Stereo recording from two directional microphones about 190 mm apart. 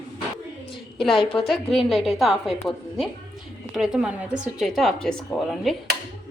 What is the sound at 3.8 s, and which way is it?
Speech, 5° right (ahead or behind).